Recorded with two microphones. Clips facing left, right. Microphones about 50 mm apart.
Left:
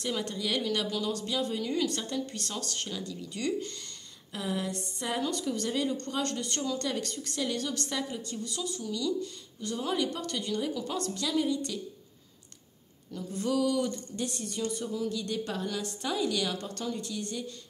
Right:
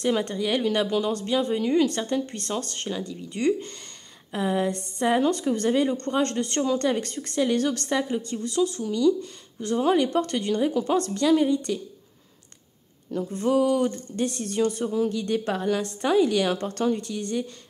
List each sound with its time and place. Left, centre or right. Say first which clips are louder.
0.0 s speech: right 8 dB; right
7.5 s speech: right 9 dB; right
13.4 s speech: right 6 dB; right